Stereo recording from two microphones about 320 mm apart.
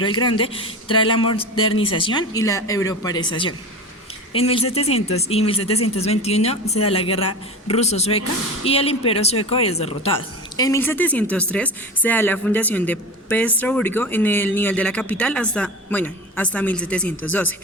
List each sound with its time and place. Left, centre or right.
0.0 s a man's voice: centre
10.6 s speech: centre